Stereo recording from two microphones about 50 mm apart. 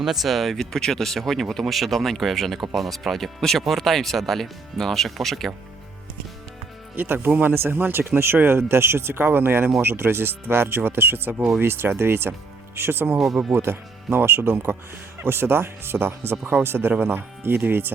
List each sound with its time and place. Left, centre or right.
0.0 s speech: centre
6.9 s speech: right
7.5 s speech: right
7.8 s speech: right
9.2 s speech: right